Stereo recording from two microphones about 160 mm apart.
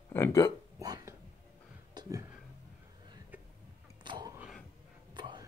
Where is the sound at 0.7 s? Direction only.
20° right (ahead or behind).